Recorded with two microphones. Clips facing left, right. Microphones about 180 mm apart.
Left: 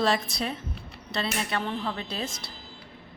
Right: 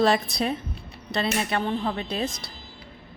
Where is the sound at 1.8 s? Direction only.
35° right (ahead or behind).